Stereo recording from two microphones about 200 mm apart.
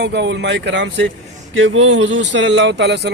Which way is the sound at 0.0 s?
60° right (ahead or behind).